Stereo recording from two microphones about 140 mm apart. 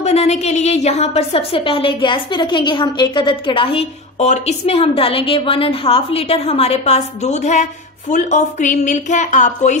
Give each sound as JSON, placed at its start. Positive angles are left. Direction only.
{"t": 0.0, "sound": "a woman's voice", "side_deg": 50}